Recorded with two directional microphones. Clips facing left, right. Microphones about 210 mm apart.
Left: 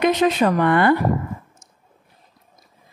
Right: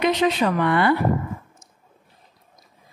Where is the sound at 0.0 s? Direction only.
45° left (ahead or behind).